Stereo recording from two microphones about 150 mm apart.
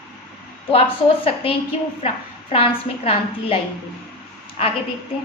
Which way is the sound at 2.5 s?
40° left (ahead or behind).